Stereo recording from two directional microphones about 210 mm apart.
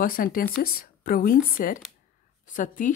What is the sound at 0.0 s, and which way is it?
Speech, 40° left (ahead or behind).